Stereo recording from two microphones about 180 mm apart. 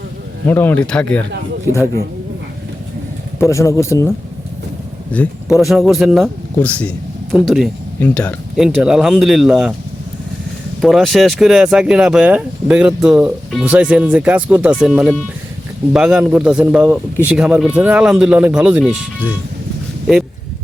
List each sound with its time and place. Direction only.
0.4 s speech: 10° left (ahead or behind)
3.5 s speech: 15° left (ahead or behind)
5.1 s speech: 5° left (ahead or behind)
10.8 s speech: centre (ahead or behind)